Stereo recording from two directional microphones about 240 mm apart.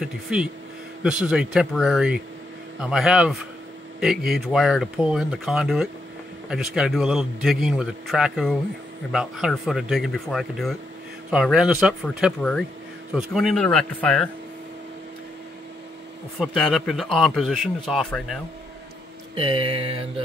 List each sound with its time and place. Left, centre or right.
0.0 s a man's voice: centre
16.3 s a man's voice: centre
19.3 s a sound: right